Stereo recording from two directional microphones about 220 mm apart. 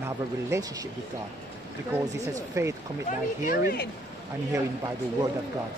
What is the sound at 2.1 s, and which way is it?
Speech, 15° right (ahead or behind).